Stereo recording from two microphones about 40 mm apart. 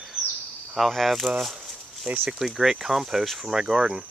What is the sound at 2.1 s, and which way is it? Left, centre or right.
Speech, right.